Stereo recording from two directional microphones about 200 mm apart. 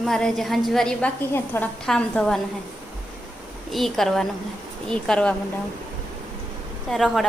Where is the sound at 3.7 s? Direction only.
Centre (ahead or behind).